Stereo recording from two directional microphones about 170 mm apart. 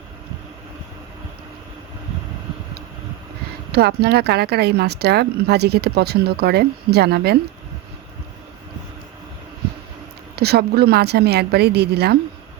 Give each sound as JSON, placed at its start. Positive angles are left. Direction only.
{"t": 3.7, "sound": "speech", "side_deg": -70}
{"t": 10.3, "sound": "speech", "side_deg": -70}